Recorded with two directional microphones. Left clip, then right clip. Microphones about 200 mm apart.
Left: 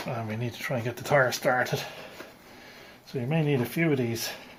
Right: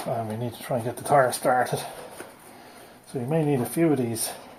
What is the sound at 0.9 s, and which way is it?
Speech, 60° left (ahead or behind).